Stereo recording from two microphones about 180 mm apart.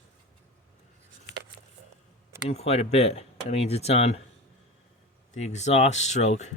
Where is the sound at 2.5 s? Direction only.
35° left (ahead or behind).